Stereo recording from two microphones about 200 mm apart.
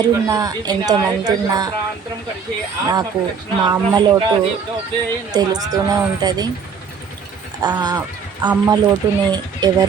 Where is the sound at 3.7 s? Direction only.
20° right (ahead or behind).